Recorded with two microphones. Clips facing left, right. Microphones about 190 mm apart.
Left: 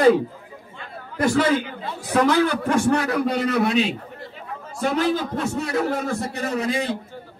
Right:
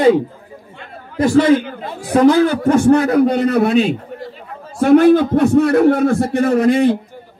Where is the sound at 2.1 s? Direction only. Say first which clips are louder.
Right 7 dB; 35° right (ahead or behind).